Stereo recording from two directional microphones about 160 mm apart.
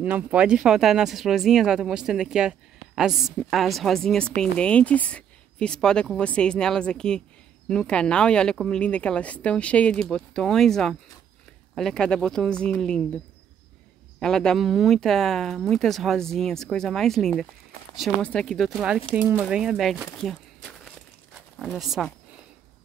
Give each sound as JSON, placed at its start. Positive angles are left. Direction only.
{"t": 0.0, "sound": "speech", "side_deg": -10}
{"t": 14.2, "sound": "speech", "side_deg": 5}
{"t": 19.4, "sound": "speech", "side_deg": -5}
{"t": 20.2, "sound": "a sound", "side_deg": 5}
{"t": 21.5, "sound": "speech", "side_deg": 0}